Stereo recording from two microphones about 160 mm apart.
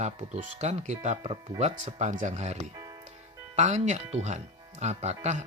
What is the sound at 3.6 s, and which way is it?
Speech, 50° right (ahead or behind).